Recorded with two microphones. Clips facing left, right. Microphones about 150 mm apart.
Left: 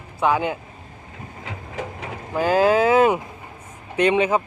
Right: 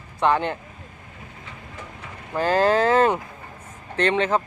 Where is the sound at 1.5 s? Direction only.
90° left.